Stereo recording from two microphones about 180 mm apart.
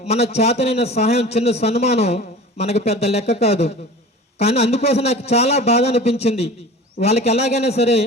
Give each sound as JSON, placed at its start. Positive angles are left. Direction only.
{"t": 0.1, "sound": "a man's voice", "side_deg": 35}